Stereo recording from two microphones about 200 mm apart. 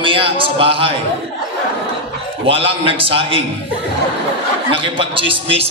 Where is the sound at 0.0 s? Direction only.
25° right (ahead or behind).